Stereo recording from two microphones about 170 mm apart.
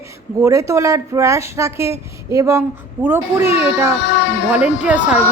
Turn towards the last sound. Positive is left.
turn(degrees=-10)  # may be behind; listen again after turning